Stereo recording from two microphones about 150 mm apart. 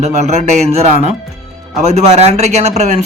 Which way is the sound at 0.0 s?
45° right (ahead or behind).